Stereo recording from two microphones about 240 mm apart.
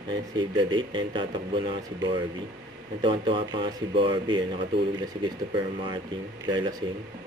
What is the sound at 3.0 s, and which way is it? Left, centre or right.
Speech, right.